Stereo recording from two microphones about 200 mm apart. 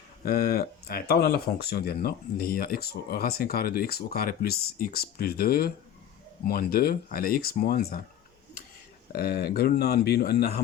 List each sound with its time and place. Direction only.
0.3 s speech: 50° left (ahead or behind)
9.1 s speech: 50° left (ahead or behind)